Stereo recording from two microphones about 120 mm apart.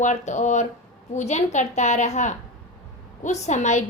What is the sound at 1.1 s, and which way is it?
A woman's voice, 70° left (ahead or behind).